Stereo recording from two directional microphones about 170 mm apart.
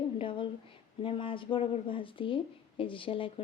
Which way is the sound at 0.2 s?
30° left (ahead or behind).